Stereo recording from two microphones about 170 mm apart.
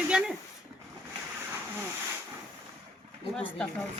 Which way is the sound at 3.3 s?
5° left (ahead or behind).